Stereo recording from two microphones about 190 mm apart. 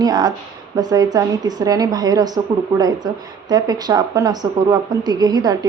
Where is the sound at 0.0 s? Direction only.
20° right (ahead or behind).